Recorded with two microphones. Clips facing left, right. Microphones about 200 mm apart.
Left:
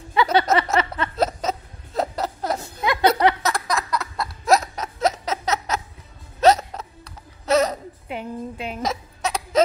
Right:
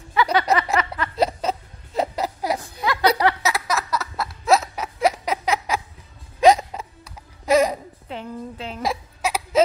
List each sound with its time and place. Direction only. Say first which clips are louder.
0.1 s a sound: left 1 dB; 25° left (ahead or behind)
1.1 s music: right 2 dB; 10° right (ahead or behind)
2.1 s chuckle: right 1 dB; 10° right (ahead or behind)
2.6 s chuckle: left 3 dB; 20° left (ahead or behind)
3.4 s laughter: even; 5° right (ahead or behind)
6.4 s hiccup: right 1 dB; 10° right (ahead or behind)
8.1 s a sound: left 2 dB; 15° left (ahead or behind)
8.8 s hiccup: right 2 dB; 5° right (ahead or behind)